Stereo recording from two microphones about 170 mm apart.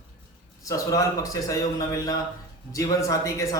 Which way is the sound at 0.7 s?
20° left (ahead or behind).